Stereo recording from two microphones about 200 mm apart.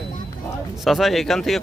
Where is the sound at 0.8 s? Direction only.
Centre (ahead or behind).